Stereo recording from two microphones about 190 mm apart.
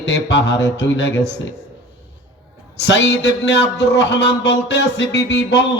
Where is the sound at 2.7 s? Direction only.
65° left (ahead or behind).